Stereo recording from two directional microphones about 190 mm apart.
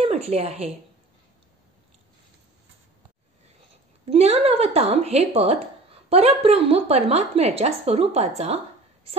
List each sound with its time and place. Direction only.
0.0 s speech: 30° right (ahead or behind)
4.1 s speech: 30° right (ahead or behind)